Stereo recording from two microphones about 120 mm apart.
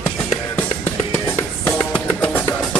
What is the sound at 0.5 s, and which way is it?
Music, 20° left (ahead or behind).